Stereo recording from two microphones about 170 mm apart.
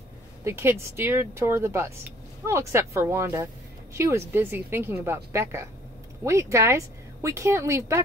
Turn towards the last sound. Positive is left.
turn(degrees=-15)  # may be behind; listen again after turning